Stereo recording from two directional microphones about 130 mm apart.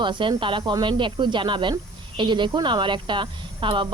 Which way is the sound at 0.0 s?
40° right (ahead or behind).